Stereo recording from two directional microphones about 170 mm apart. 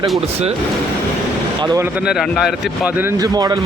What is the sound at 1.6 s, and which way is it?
Speech, 20° right (ahead or behind).